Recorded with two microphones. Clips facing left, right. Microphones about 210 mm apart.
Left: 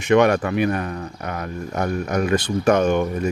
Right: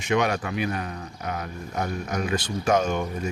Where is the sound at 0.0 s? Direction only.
60° left (ahead or behind).